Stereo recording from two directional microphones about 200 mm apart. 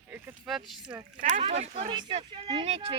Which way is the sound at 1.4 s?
30° right (ahead or behind).